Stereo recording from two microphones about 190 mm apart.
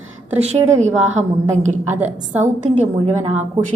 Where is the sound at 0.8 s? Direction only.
40° right (ahead or behind).